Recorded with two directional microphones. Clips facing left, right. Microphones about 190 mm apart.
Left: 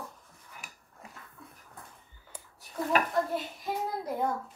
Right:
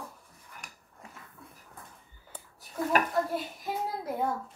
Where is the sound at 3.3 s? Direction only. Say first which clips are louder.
Even; centre (ahead or behind).